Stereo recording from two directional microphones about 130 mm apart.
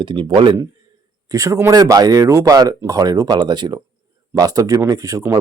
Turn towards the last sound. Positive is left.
turn(degrees=-25)  # may be behind; listen again after turning